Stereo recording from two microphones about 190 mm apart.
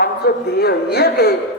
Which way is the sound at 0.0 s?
55° left (ahead or behind).